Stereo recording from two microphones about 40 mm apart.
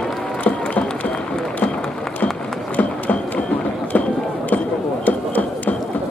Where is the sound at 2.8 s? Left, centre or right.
Left.